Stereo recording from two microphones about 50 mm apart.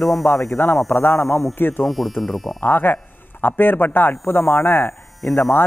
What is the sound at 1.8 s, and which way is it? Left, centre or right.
Speech, centre.